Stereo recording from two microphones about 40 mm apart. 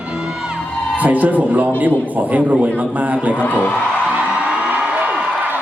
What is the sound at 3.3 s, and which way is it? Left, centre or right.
Speech, left.